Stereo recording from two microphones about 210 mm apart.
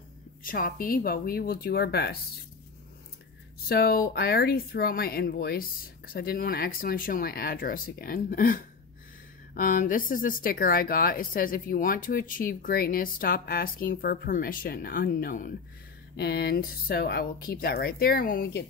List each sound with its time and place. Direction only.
0.4 s speech: 40° left (ahead or behind)
3.6 s speech: 45° left (ahead or behind)